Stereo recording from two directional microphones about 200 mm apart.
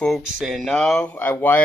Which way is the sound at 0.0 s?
Centre (ahead or behind).